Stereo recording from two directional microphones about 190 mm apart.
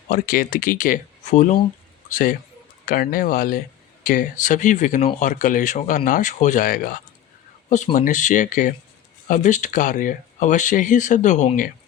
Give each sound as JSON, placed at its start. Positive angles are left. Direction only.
{"t": 0.1, "sound": "a man's voice", "side_deg": 45}
{"t": 7.9, "sound": "speech", "side_deg": 40}